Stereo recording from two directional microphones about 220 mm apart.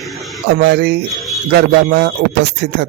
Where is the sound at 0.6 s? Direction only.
50° right (ahead or behind).